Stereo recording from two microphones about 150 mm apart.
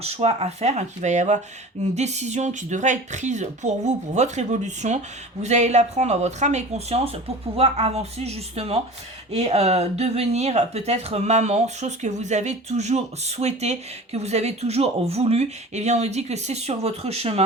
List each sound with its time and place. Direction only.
0.0 s speech: 45° right (ahead or behind)